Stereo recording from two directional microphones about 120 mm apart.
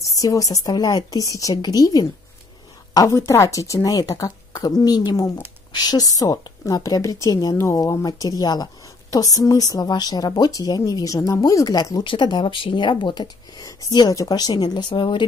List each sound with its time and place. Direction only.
0.2 s a woman's voice: 30° left (ahead or behind)